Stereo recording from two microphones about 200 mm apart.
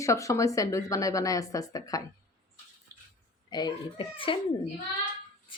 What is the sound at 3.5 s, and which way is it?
Speech, 20° left (ahead or behind).